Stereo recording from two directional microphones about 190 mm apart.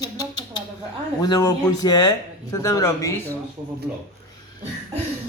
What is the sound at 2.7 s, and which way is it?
Speech, 20° left (ahead or behind).